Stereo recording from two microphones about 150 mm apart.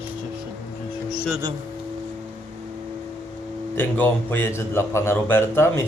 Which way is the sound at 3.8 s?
15° left (ahead or behind).